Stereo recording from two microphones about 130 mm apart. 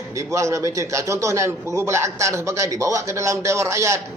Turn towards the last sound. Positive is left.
turn(degrees=-20)  # may be behind; listen again after turning